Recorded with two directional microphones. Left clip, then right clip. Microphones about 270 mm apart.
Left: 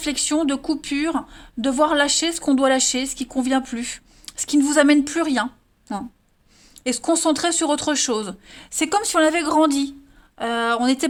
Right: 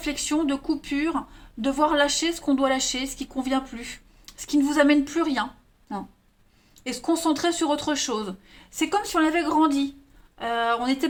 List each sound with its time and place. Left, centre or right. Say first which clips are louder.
0.0 s speech: left 4 dB; left
6.8 s speech: left 5 dB; left